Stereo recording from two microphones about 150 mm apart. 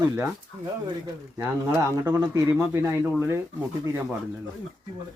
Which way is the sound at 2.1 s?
20° right (ahead or behind).